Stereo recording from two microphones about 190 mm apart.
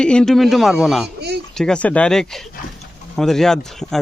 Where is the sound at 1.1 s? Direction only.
60° right (ahead or behind).